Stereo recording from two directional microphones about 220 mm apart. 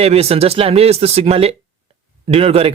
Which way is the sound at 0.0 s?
25° right (ahead or behind).